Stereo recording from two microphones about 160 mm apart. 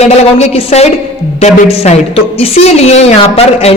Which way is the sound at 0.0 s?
40° left (ahead or behind).